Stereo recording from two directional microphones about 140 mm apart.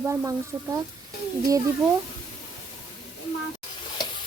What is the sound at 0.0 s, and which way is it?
Speech, 20° right (ahead or behind).